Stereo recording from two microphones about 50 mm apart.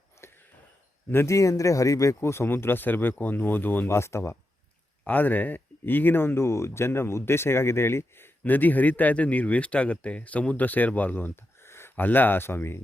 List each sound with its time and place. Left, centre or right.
0.2 s a sound: left
1.3 s speech: left
3.8 s speech: left
5.0 s speech: left
11.6 s a sound: left
11.9 s speech: left